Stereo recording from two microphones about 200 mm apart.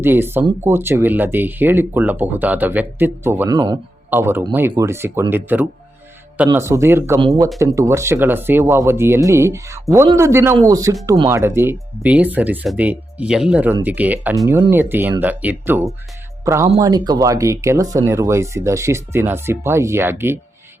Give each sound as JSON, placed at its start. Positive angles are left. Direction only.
{"t": 0.0, "sound": "speech", "side_deg": -10}